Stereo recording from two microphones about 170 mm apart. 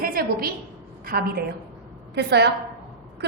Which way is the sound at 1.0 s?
60° right (ahead or behind).